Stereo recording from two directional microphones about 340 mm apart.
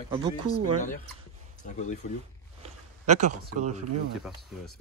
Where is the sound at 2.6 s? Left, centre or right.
Centre.